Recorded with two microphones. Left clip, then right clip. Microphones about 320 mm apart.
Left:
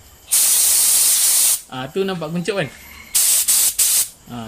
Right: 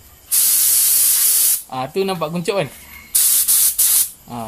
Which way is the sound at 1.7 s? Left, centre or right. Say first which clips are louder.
Right 2 dB; centre.